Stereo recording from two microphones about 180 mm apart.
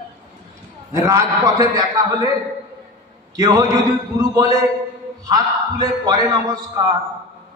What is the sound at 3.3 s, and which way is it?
A man's voice, 20° right (ahead or behind).